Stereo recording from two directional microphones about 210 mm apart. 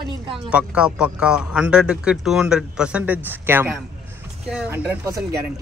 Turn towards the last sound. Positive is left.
turn(degrees=-10)  # may be behind; listen again after turning